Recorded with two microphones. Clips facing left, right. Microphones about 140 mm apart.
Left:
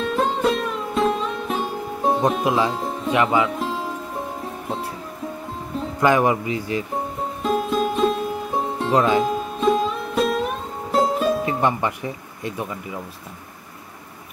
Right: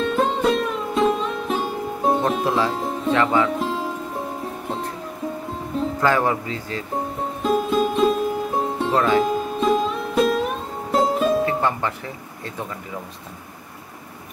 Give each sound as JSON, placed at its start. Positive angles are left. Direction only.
{"t": 0.0, "sound": "music", "side_deg": 0}
{"t": 2.4, "sound": "speech", "side_deg": 15}
{"t": 2.7, "sound": "music", "side_deg": 0}
{"t": 3.1, "sound": "music", "side_deg": 10}
{"t": 5.9, "sound": "speech", "side_deg": 15}
{"t": 7.4, "sound": "music", "side_deg": 0}
{"t": 8.9, "sound": "speech", "side_deg": 15}
{"t": 9.2, "sound": "music", "side_deg": 0}
{"t": 11.4, "sound": "speech", "side_deg": 15}